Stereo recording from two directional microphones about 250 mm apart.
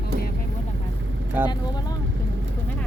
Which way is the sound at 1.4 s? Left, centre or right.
Centre.